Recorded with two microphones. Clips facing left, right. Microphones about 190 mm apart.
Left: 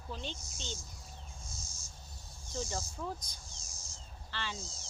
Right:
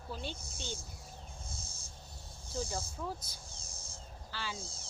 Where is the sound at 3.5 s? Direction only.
60° right (ahead or behind).